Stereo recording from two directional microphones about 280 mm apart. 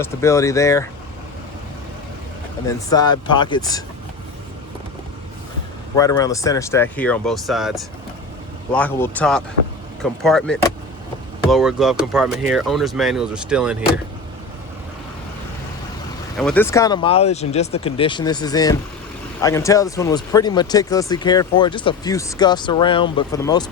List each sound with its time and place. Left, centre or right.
0.0 s speech: centre
2.6 s speech: centre
6.0 s speech: centre
16.4 s speech: centre